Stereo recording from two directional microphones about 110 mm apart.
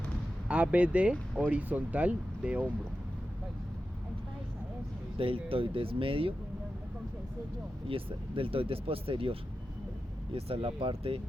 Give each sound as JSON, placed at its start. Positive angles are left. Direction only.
{"t": 0.4, "sound": "speech", "side_deg": -15}
{"t": 5.1, "sound": "speech", "side_deg": -55}
{"t": 7.9, "sound": "speech", "side_deg": -55}